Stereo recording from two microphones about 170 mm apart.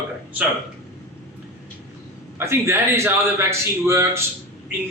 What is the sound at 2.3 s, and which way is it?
A man's voice, 15° right (ahead or behind).